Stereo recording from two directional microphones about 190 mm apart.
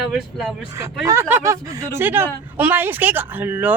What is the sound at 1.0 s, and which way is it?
Speech, 15° right (ahead or behind).